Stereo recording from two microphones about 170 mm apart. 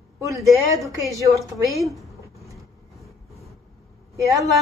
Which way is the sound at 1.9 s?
Centre (ahead or behind).